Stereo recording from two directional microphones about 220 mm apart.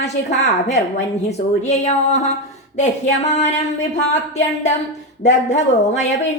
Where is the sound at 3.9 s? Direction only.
30° left (ahead or behind).